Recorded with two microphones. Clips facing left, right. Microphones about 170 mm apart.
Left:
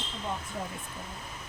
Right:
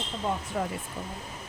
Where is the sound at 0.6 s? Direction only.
80° right.